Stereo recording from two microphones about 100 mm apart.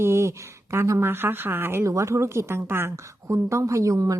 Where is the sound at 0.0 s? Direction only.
25° right (ahead or behind).